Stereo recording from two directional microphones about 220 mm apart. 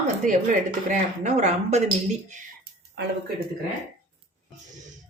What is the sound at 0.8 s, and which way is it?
Speech, 30° right (ahead or behind).